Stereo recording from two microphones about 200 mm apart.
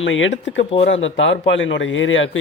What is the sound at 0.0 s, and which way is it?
Speech, 70° left (ahead or behind).